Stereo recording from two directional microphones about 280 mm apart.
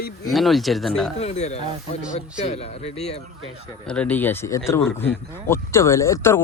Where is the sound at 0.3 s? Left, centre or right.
Centre.